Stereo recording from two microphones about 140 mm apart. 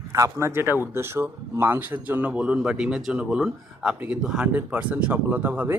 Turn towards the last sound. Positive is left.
turn(degrees=-10)  # may be behind; listen again after turning